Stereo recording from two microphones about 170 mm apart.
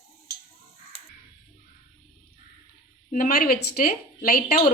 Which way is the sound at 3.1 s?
60° left (ahead or behind).